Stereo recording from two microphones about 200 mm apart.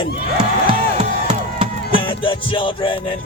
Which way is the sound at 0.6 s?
30° right (ahead or behind).